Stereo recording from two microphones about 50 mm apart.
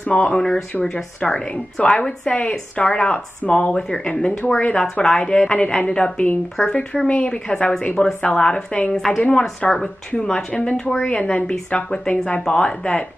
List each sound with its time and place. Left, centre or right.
0.1 s a woman's voice: centre
10.1 s a woman's voice: centre
11.1 s a woman's voice: left